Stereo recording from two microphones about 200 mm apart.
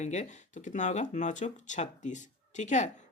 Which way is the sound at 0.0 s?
35° left (ahead or behind).